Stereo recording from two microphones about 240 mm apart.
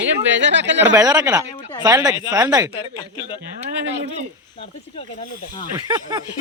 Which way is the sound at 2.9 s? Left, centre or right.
Centre.